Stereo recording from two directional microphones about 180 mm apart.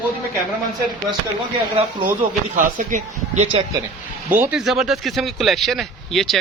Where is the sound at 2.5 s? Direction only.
45° right (ahead or behind).